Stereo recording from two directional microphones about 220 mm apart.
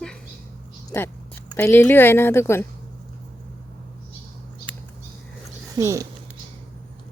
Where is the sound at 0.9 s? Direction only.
10° left (ahead or behind).